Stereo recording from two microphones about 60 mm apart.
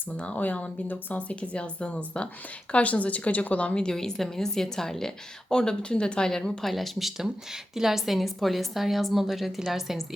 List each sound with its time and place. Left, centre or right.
0.2 s a woman's voice: left; by 10.0 s centre